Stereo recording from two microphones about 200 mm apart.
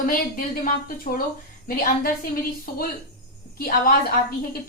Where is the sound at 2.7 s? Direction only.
45° left (ahead or behind).